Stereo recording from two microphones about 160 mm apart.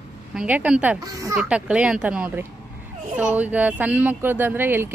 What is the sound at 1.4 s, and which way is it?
Speech, 5° right (ahead or behind).